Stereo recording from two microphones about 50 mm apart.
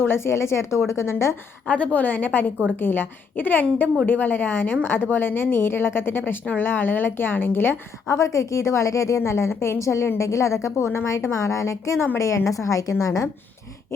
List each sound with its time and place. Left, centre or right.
0.0 s speech: left
1.6 s a woman's voice: left
8.0 s a woman's voice: left
11.3 s a woman's voice: left
12.5 s a woman's voice: left